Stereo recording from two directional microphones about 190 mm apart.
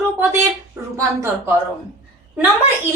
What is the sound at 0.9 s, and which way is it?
Speech, 15° right (ahead or behind).